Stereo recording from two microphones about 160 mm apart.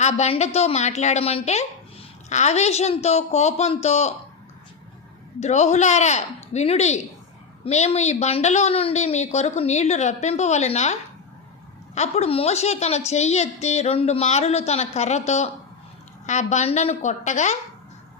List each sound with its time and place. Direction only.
0.0 s a woman's voice: 45° left (ahead or behind)
5.4 s a woman's voice: 45° left (ahead or behind)
11.9 s a woman's voice: 40° left (ahead or behind)